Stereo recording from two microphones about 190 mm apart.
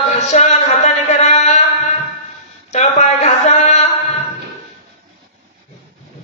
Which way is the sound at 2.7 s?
40° left (ahead or behind).